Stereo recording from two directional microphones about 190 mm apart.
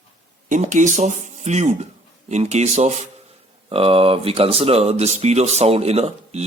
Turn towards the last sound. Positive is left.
turn(degrees=-35)  # may be behind; listen again after turning